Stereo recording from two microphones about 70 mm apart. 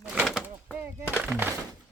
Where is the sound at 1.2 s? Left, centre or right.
Right.